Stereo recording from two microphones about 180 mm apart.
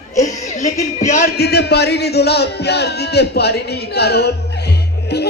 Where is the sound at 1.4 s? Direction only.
65° left (ahead or behind).